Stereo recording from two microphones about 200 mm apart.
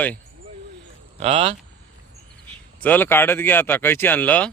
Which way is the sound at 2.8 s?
10° left (ahead or behind).